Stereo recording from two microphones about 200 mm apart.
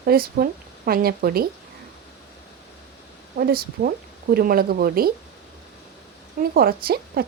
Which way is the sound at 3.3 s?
50° right (ahead or behind).